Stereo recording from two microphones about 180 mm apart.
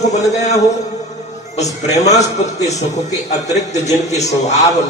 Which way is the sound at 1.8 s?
40° left (ahead or behind).